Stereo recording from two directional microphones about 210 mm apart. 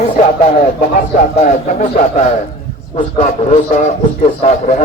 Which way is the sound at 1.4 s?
35° left (ahead or behind).